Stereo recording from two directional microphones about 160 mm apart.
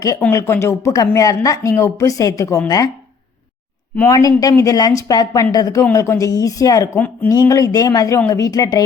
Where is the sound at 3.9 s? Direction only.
20° left (ahead or behind).